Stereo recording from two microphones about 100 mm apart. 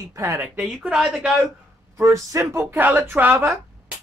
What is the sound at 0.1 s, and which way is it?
Speech, 30° right (ahead or behind).